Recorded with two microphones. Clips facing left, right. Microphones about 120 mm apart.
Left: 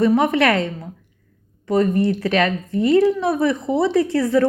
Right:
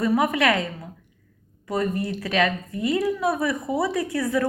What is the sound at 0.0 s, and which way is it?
A woman's voice, 25° left (ahead or behind).